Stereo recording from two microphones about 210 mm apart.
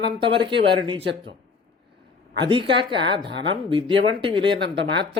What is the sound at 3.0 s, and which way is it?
Speech, 55° right (ahead or behind).